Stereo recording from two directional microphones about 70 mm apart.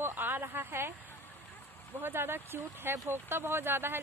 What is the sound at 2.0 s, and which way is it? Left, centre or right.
Speech, right.